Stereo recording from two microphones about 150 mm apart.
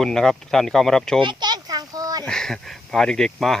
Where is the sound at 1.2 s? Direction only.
30° right (ahead or behind).